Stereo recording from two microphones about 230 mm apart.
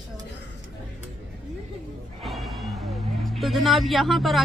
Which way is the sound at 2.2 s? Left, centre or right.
Centre.